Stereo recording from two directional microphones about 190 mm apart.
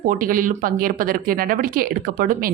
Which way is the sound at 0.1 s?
45° right (ahead or behind).